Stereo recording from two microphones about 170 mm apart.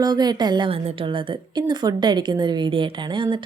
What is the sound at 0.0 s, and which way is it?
A woman's voice, 25° right (ahead or behind).